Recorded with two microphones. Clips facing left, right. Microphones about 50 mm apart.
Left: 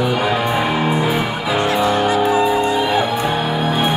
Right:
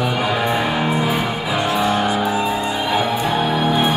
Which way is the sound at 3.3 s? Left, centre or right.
Centre.